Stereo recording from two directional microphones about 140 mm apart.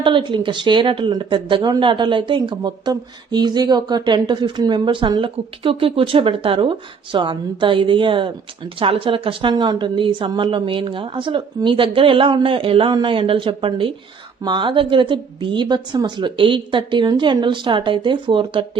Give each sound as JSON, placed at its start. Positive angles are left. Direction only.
{"t": 0.0, "sound": "speech", "side_deg": -35}